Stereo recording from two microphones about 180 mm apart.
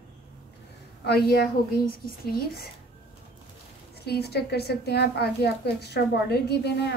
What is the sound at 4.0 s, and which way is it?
A woman's voice, 65° left (ahead or behind).